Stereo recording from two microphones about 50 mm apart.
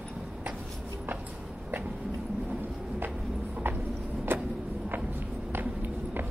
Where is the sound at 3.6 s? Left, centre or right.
Right.